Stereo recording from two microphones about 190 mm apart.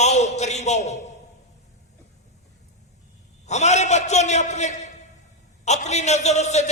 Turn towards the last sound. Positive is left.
turn(degrees=35)  # may be behind; listen again after turning